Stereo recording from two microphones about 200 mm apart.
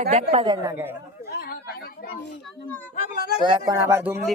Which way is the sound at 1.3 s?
50° left (ahead or behind).